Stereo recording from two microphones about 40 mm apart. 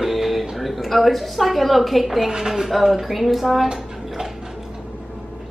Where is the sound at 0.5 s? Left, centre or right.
Centre.